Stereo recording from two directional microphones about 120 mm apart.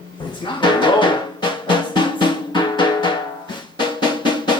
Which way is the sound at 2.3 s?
40° left (ahead or behind).